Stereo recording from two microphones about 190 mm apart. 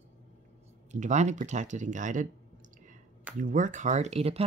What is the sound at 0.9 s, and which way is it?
Speech, 40° right (ahead or behind).